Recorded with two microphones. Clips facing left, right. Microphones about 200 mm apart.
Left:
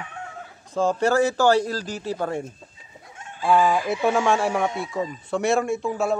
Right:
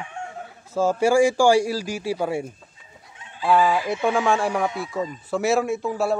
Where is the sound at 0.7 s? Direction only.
5° right (ahead or behind).